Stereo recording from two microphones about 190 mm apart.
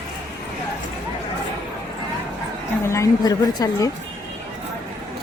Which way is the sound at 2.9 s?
15° left (ahead or behind).